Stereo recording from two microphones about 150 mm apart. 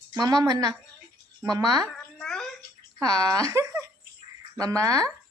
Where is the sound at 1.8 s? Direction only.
5° left (ahead or behind).